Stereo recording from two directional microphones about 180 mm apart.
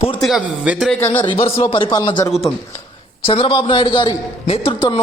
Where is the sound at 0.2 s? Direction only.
Centre (ahead or behind).